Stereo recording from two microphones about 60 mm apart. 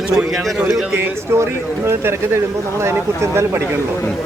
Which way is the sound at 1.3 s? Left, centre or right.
Right.